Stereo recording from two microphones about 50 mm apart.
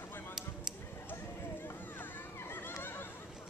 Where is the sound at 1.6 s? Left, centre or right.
Left.